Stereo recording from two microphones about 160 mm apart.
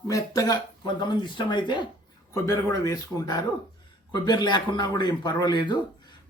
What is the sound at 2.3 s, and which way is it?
Speech, 20° left (ahead or behind).